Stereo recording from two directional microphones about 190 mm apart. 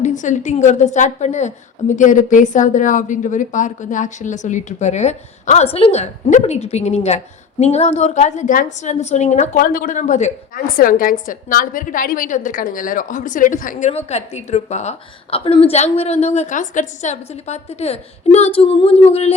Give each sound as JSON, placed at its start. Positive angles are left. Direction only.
{"t": 0.0, "sound": "a woman's voice", "side_deg": 40}